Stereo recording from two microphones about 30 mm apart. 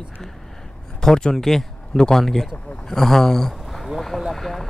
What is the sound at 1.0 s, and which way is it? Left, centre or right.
Speech, left.